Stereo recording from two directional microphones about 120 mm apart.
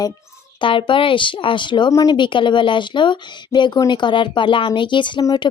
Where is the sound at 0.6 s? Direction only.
45° left (ahead or behind).